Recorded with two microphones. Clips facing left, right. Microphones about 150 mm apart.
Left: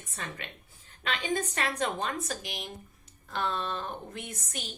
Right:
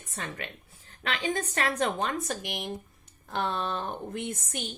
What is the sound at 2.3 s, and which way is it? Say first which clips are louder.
A woman's voice: right 4 dB; 55° right (ahead or behind).